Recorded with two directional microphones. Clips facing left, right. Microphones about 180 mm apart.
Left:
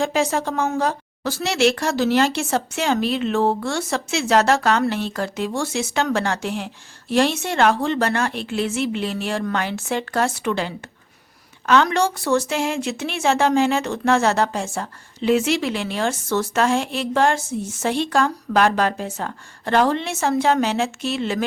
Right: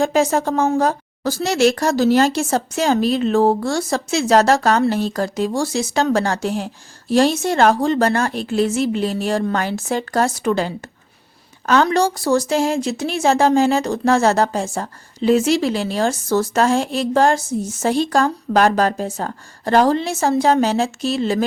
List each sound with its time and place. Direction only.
0.0 s speech: 45° right (ahead or behind)